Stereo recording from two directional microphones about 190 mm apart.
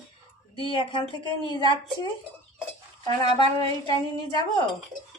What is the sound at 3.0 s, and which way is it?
Speech, 20° left (ahead or behind).